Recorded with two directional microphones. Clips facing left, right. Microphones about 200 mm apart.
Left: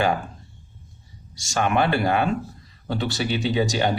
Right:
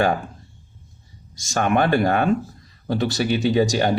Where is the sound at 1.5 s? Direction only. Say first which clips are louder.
Right 2 dB; 50° right (ahead or behind).